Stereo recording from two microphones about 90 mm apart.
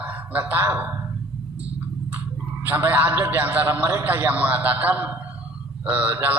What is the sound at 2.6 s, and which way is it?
A man's voice, 20° right (ahead or behind).